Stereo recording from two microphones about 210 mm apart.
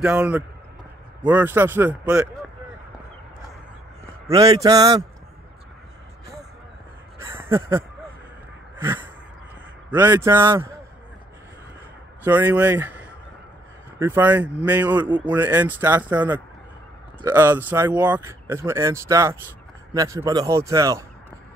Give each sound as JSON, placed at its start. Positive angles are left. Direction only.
{"t": 0.0, "sound": "a man's voice", "side_deg": -5}
{"t": 4.0, "sound": "a man's voice", "side_deg": -15}
{"t": 7.2, "sound": "a sound", "side_deg": -10}
{"t": 8.8, "sound": "a sound", "side_deg": -10}
{"t": 9.8, "sound": "speech", "side_deg": -10}
{"t": 12.2, "sound": "speech", "side_deg": -10}